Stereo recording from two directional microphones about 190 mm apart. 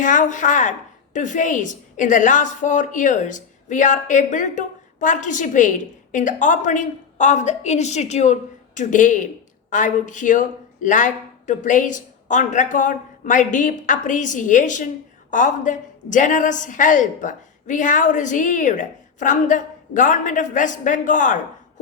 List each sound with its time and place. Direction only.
0.0 s a woman's voice: 40° left (ahead or behind)